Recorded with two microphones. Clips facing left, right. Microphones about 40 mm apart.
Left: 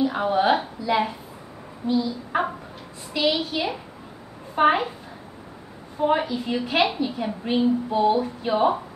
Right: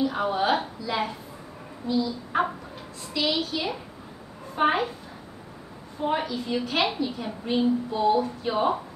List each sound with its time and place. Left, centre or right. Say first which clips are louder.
0.0 s a woman's voice: left 3 dB; centre
5.9 s a woman's voice: left 5 dB; centre